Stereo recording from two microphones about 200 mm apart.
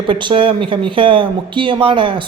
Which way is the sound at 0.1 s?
25° right (ahead or behind).